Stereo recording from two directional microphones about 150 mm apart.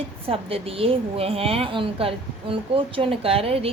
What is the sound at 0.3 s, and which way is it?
A woman's voice, 40° right (ahead or behind).